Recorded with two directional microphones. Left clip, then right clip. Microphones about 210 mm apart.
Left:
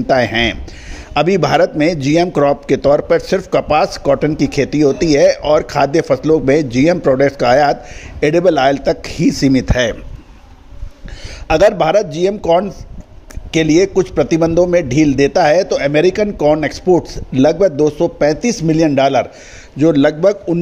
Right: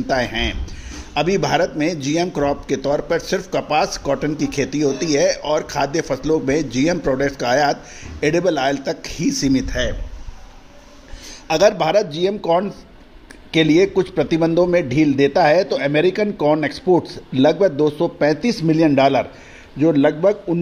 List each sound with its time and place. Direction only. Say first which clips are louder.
0.0 s a man's voice: left 7 dB; 35° left (ahead or behind)
11.4 s a man's voice: left 4 dB; 40° left (ahead or behind)